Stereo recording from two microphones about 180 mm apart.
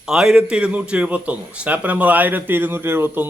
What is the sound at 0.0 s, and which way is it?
A man's voice, 5° right (ahead or behind).